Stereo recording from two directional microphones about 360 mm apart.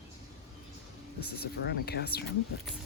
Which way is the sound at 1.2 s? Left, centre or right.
Left.